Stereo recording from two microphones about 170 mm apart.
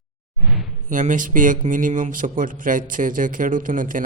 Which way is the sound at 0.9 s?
50° right (ahead or behind).